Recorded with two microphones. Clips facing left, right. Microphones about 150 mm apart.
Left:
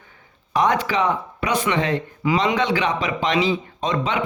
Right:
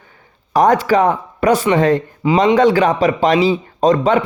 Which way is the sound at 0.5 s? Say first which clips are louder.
Right 7 dB; 40° right (ahead or behind).